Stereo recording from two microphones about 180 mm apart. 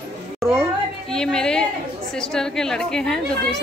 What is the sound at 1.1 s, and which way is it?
A woman's voice, 5° left (ahead or behind).